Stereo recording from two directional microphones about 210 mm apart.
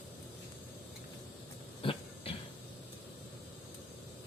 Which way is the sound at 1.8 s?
25° left (ahead or behind).